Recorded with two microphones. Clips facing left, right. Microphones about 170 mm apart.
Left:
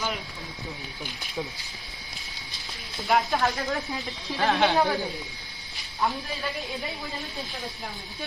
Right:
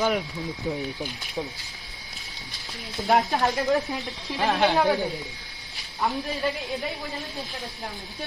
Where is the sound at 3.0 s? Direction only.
40° right (ahead or behind).